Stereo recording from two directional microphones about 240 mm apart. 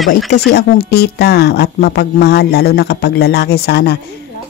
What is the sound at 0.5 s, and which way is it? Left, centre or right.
Speech, left.